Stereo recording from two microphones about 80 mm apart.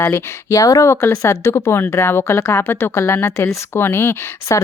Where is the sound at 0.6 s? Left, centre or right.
Left.